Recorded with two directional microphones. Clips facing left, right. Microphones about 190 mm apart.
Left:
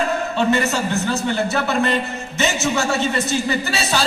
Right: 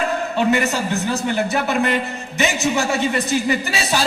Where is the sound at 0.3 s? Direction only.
15° right (ahead or behind).